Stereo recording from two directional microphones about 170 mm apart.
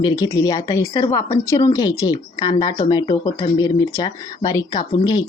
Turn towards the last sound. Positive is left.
turn(degrees=25)  # may be behind; listen again after turning